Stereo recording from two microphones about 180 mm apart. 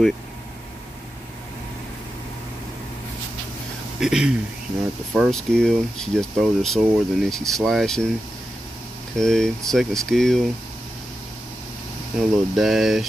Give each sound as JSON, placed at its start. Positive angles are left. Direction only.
{"t": 4.0, "sound": "speech", "side_deg": -5}
{"t": 9.1, "sound": "speech", "side_deg": 5}
{"t": 12.2, "sound": "speech", "side_deg": 0}